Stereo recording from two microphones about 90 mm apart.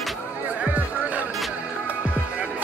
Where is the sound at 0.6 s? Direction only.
15° right (ahead or behind).